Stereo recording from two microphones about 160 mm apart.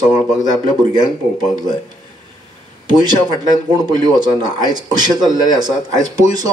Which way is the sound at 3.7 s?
25° right (ahead or behind).